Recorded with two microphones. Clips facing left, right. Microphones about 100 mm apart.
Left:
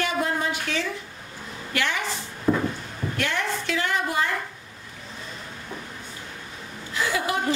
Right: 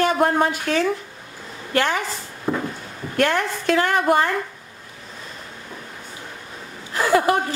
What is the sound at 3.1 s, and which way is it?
A woman's voice, 50° right (ahead or behind).